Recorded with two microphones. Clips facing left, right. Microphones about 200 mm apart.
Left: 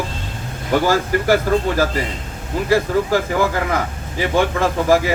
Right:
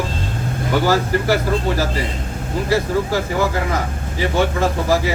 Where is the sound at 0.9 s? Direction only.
45° left (ahead or behind).